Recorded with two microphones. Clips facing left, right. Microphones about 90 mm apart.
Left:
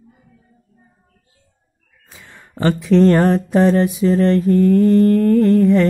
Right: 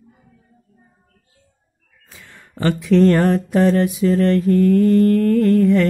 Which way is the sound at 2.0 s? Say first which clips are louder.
Left 1 dB; 25° left (ahead or behind).